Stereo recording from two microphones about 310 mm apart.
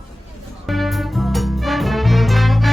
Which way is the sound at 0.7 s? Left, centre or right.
Centre.